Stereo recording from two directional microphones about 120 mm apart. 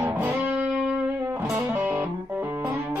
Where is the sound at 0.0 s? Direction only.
15° right (ahead or behind).